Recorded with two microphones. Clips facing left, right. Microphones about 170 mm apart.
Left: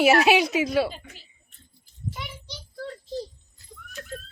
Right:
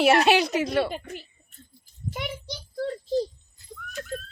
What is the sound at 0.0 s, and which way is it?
Speech, 5° left (ahead or behind).